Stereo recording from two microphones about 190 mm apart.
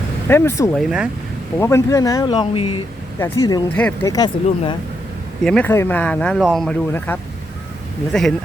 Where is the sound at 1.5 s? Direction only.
15° left (ahead or behind).